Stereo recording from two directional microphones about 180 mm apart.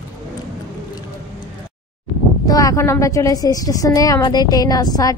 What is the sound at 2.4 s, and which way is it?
A woman's voice, 20° left (ahead or behind).